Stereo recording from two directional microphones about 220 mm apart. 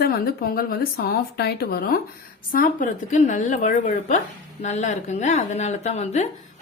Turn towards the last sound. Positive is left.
turn(degrees=30)  # may be behind; listen again after turning